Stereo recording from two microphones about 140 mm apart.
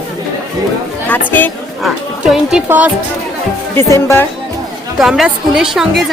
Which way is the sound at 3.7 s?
20° left (ahead or behind).